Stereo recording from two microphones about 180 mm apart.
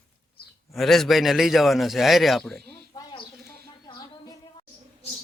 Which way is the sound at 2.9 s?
25° left (ahead or behind).